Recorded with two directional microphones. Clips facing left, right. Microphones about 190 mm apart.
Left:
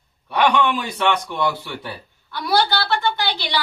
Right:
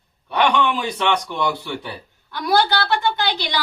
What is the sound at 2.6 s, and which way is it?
Speech, 15° right (ahead or behind).